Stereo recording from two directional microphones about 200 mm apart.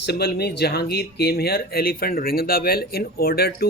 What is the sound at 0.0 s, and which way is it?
Speech, 55° left (ahead or behind).